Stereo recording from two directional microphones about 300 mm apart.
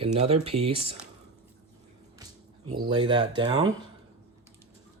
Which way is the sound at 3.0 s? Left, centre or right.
Centre.